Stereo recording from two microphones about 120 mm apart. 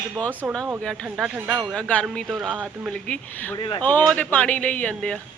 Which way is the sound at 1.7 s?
10° left (ahead or behind).